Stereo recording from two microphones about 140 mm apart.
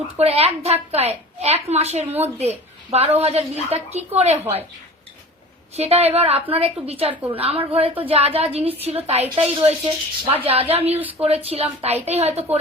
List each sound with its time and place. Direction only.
0.2 s a woman's voice: 45° right (ahead or behind)
5.7 s a woman's voice: 50° right (ahead or behind)